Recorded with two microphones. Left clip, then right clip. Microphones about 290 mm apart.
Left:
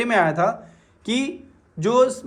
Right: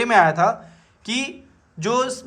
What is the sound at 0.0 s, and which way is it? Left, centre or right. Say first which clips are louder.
Speech: right 3 dB; centre.